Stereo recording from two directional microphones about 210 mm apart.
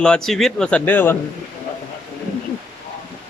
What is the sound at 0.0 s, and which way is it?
A man's voice, 5° left (ahead or behind).